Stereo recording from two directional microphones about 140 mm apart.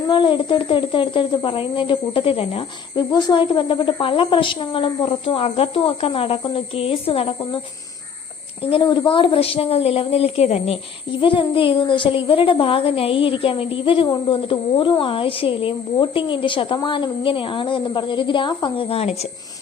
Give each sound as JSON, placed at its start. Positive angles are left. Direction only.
{"t": 0.1, "sound": "a child's voice", "side_deg": 35}
{"t": 8.7, "sound": "speech", "side_deg": 35}
{"t": 11.2, "sound": "a child's voice", "side_deg": 35}